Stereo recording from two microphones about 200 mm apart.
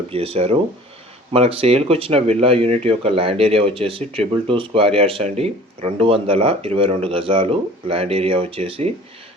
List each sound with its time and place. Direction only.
0.1 s speech: 30° right (ahead or behind)